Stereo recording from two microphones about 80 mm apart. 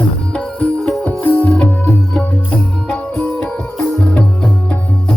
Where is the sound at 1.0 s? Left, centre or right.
Centre.